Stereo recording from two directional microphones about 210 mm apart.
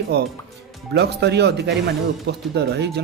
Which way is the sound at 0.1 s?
55° right (ahead or behind).